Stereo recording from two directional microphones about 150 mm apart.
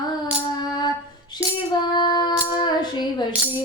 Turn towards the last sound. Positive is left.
turn(degrees=30)  # may be behind; listen again after turning